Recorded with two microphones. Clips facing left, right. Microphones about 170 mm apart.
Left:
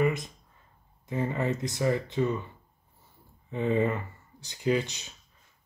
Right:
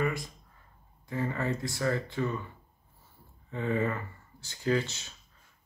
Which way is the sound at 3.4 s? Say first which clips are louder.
Left 4 dB; 20° left (ahead or behind).